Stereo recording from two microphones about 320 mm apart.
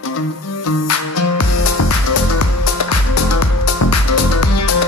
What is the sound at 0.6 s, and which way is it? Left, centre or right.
Music, left.